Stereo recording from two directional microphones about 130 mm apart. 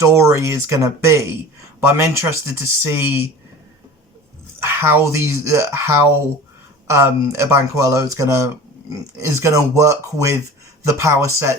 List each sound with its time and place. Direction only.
0.0 s speech: 20° right (ahead or behind)
4.6 s speech: 20° right (ahead or behind)